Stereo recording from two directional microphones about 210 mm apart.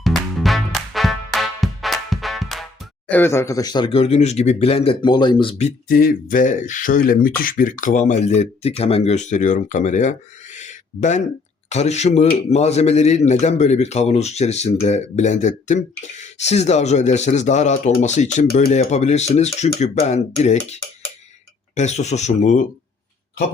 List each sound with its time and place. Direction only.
0.0 s music: centre (ahead or behind)
3.1 s speech: 10° left (ahead or behind); by 20.7 s 30° left (ahead or behind)
21.8 s speech: 30° left (ahead or behind)